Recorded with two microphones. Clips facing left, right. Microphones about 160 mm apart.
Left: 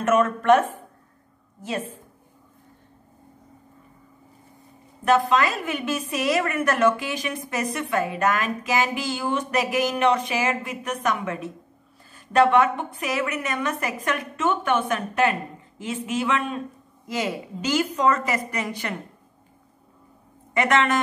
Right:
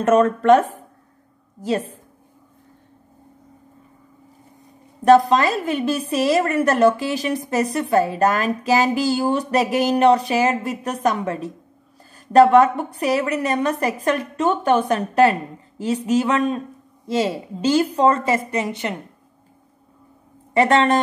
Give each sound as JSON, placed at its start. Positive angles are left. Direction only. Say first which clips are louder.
{"t": 0.0, "sound": "speech", "louder": "right 5 dB", "side_deg": -35}
{"t": 5.0, "sound": "a woman's voice", "louder": "right 6 dB", "side_deg": -35}
{"t": 20.5, "sound": "speech", "louder": "right 5 dB", "side_deg": -30}